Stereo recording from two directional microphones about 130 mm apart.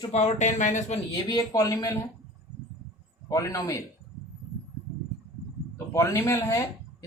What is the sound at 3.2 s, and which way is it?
Speech, 25° left (ahead or behind).